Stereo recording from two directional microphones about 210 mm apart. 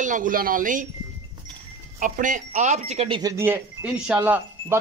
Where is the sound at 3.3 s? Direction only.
10° right (ahead or behind).